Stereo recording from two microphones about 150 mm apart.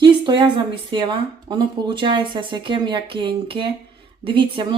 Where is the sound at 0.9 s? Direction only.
30° right (ahead or behind).